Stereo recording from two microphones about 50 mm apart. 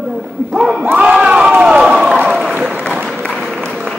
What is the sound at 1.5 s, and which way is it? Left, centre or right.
Run, centre.